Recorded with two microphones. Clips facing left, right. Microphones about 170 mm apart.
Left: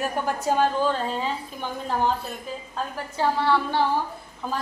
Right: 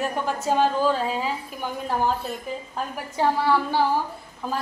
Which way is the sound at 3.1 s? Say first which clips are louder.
Right 1 dB; 10° right (ahead or behind).